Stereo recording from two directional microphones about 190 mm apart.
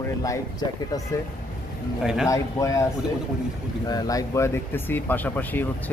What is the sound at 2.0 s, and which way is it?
Speech, 5° right (ahead or behind).